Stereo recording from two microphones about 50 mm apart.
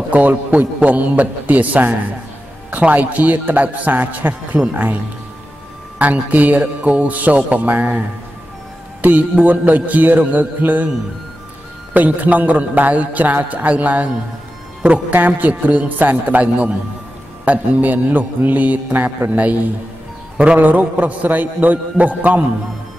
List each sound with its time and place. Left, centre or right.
0.1 s a man's voice: right
5.9 s a man's voice: right
9.0 s a man's voice: right
11.9 s a man's voice: right